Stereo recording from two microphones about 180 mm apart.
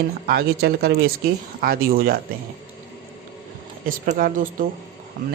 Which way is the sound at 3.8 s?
50° right (ahead or behind).